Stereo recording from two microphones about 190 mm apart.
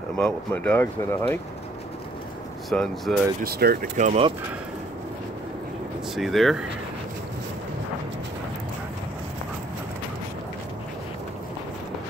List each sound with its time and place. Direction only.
0.2 s speech: 10° left (ahead or behind)
2.7 s speech: 5° left (ahead or behind)
3.4 s speech: 55° right (ahead or behind)
3.9 s speech: 40° right (ahead or behind)
6.1 s speech: centre (ahead or behind)